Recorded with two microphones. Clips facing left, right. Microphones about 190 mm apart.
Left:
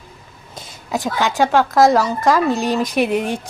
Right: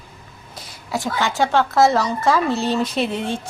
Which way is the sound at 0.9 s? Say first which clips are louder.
Left 2 dB; 15° left (ahead or behind).